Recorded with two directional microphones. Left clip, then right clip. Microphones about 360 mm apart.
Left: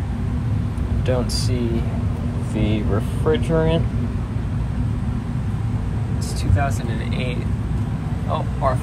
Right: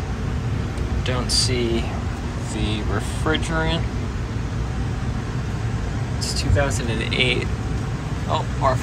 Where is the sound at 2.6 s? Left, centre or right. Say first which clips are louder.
Left 3 dB; centre.